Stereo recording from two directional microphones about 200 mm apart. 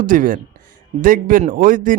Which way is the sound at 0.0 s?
40° right (ahead or behind).